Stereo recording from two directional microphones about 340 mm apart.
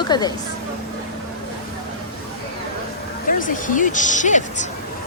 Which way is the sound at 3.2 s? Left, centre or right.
Left.